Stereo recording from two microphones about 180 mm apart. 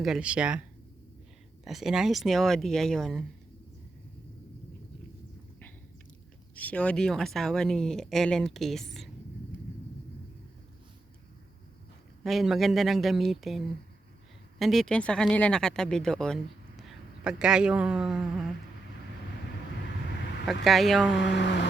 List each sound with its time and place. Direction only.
0.0 s speech: 5° right (ahead or behind)
1.6 s speech: centre (ahead or behind)
6.6 s speech: 5° left (ahead or behind)
12.2 s speech: centre (ahead or behind)
14.6 s speech: centre (ahead or behind)
20.5 s speech: centre (ahead or behind)
21.3 s music: 75° left (ahead or behind)